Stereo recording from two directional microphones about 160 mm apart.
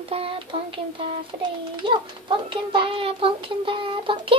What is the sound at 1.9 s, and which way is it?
Speech, 30° right (ahead or behind).